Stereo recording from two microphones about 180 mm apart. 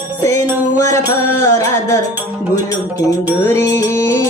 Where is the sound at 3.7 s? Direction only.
15° left (ahead or behind).